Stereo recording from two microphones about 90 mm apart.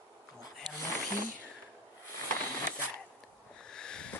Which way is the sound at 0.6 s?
50° right (ahead or behind).